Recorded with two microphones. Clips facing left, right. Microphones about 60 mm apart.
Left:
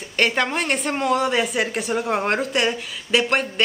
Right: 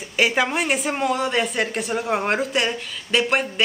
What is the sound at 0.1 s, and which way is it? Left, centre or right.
Speech, centre.